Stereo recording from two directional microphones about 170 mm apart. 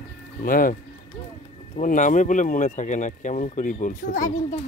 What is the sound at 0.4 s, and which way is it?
Speech, 55° left (ahead or behind).